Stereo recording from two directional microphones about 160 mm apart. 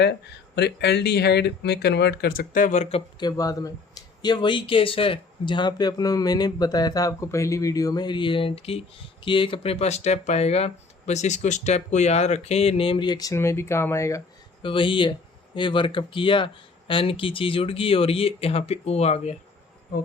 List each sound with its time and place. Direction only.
0.5 s speech: 90° left; by 3.0 s 45° left (ahead or behind)
3.2 s speech: 25° left (ahead or behind)
14.6 s speech: 30° left (ahead or behind)